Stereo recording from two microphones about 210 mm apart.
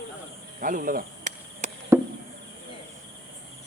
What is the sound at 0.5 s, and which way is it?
Arrow, 40° right (ahead or behind).